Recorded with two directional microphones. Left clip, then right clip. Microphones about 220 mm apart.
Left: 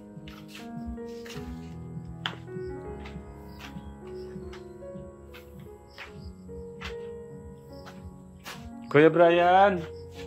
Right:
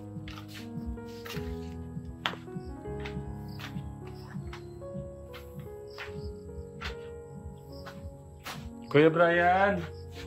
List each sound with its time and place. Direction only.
8.8 s speech: 20° left (ahead or behind)